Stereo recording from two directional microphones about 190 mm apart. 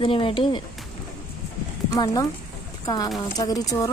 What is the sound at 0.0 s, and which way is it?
Speech, 25° left (ahead or behind).